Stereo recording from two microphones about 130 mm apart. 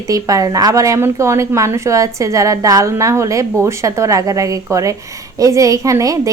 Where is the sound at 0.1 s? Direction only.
25° right (ahead or behind).